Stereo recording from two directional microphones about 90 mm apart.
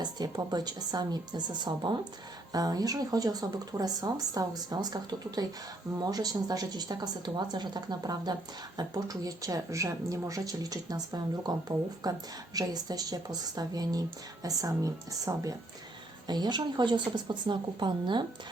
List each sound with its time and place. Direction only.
0.0 s speech: 50° right (ahead or behind)
2.5 s a woman's voice: 45° right (ahead or behind)
16.2 s speech: 50° right (ahead or behind)